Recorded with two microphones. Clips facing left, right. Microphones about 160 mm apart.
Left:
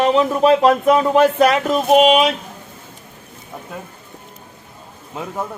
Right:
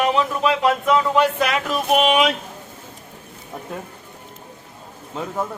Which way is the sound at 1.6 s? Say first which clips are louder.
Left 6 dB; 25° left (ahead or behind).